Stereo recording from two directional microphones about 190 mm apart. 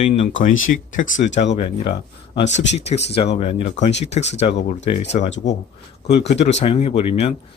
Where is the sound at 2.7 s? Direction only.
35° left (ahead or behind).